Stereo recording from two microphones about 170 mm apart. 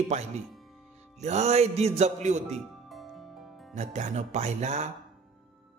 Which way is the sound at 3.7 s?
45° right (ahead or behind).